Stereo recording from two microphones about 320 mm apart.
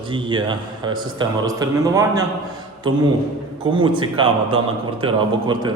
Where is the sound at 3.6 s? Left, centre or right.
Centre.